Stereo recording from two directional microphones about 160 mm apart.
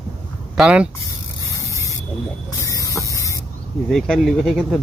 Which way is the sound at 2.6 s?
20° left (ahead or behind).